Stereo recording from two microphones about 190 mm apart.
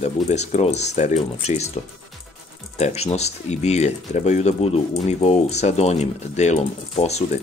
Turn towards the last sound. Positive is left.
turn(degrees=35)  # may be behind; listen again after turning